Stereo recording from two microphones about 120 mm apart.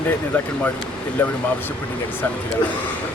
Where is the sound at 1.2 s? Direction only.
15° left (ahead or behind).